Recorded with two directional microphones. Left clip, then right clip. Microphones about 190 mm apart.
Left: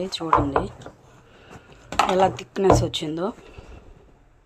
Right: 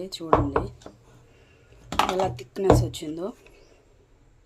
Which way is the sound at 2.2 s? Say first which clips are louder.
Left 3 dB; 15° left (ahead or behind).